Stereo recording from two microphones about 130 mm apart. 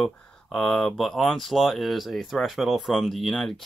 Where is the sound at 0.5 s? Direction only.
5° left (ahead or behind).